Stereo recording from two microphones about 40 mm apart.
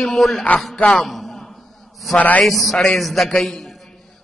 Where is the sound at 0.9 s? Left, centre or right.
Centre.